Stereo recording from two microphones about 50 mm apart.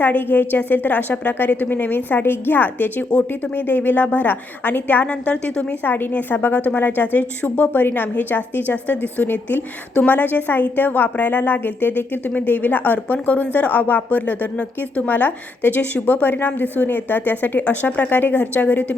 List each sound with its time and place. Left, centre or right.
0.0 s a woman's voice: left
5.0 s a woman's voice: left
5.8 s a woman's voice: left